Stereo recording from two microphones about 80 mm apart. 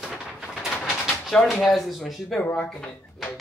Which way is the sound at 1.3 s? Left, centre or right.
Centre.